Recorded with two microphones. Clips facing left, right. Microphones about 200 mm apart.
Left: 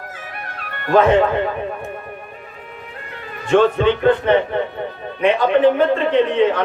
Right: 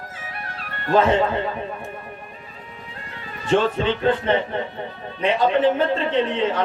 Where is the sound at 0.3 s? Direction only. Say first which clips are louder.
Left 2 dB; 60° left (ahead or behind).